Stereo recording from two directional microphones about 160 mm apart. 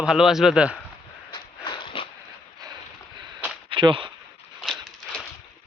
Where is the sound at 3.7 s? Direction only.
30° right (ahead or behind).